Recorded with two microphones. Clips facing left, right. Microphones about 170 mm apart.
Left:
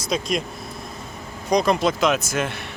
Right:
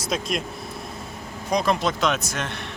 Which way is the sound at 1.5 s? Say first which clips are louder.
Left 3 dB; centre (ahead or behind).